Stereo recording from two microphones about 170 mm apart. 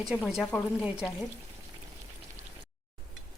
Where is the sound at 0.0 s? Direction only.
Centre (ahead or behind).